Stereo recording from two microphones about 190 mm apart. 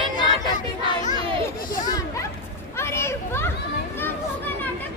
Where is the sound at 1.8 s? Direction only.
20° left (ahead or behind).